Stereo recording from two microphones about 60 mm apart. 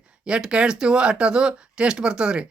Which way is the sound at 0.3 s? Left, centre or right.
Centre.